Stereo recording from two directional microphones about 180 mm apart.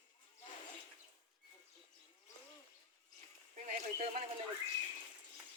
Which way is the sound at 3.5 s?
45° right (ahead or behind).